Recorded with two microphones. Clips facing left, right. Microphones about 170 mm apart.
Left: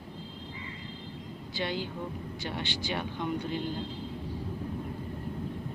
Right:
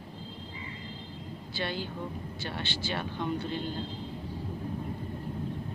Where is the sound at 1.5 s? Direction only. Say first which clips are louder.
Left 1 dB; 15° left (ahead or behind).